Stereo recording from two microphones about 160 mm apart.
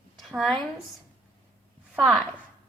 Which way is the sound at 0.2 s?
Centre (ahead or behind).